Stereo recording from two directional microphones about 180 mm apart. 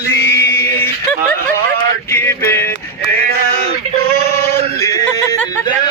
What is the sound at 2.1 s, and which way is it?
Music, 10° left (ahead or behind).